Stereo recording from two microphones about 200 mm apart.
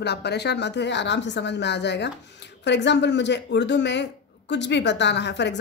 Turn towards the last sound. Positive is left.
turn(degrees=60)  # may be behind; listen again after turning